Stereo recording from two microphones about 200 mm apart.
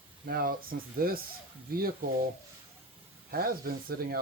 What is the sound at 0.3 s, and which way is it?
Speech, 45° right (ahead or behind).